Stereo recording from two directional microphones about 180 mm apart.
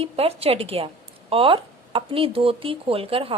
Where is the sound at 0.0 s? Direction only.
35° right (ahead or behind).